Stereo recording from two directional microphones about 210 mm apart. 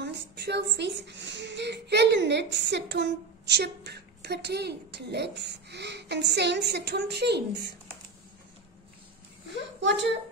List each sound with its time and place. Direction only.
0.0 s a sound: 55° right (ahead or behind)
0.7 s a child's voice: 55° right (ahead or behind)
9.8 s a woman's voice: 60° right (ahead or behind)